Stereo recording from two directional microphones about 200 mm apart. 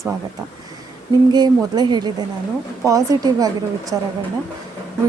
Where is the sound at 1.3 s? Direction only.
20° right (ahead or behind).